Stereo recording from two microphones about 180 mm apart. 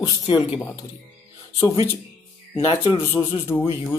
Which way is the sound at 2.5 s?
30° left (ahead or behind).